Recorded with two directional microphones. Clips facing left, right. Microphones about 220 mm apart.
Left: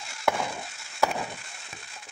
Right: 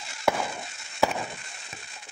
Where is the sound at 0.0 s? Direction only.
Centre (ahead or behind).